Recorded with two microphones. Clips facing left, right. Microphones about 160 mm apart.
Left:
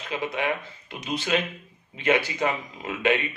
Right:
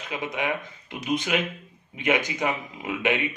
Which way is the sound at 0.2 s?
15° right (ahead or behind).